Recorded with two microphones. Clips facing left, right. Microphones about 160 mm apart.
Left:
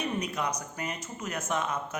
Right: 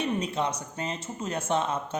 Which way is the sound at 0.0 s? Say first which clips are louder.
Right 3 dB; 30° right (ahead or behind).